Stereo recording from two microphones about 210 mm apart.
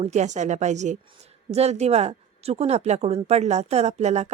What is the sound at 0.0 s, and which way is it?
A woman's voice, 35° right (ahead or behind).